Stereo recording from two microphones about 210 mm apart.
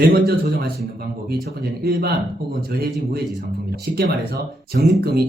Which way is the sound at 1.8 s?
45° right (ahead or behind).